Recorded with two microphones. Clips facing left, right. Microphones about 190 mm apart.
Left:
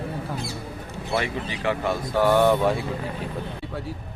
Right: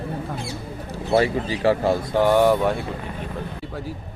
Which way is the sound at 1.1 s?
35° right (ahead or behind).